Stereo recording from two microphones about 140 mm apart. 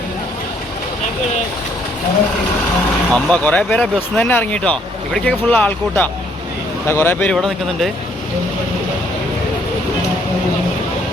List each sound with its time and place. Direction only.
3.1 s speech: 10° left (ahead or behind)
7.3 s speech: centre (ahead or behind)